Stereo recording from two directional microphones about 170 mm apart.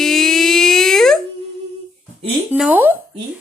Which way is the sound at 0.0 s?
Centre (ahead or behind).